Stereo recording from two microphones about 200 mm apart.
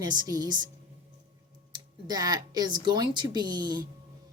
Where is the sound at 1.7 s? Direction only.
20° right (ahead or behind).